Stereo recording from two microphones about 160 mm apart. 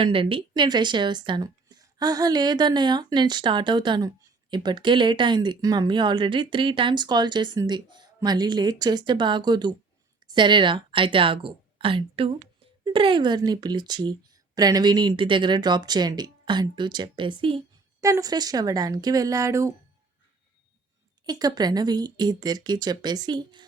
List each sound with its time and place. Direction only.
0.0 s a woman's voice: 35° right (ahead or behind)
18.0 s speech: 20° right (ahead or behind)
21.2 s speech: 25° right (ahead or behind)